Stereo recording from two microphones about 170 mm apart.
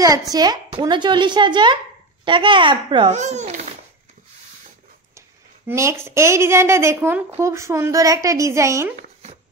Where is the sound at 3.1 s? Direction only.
45° right (ahead or behind).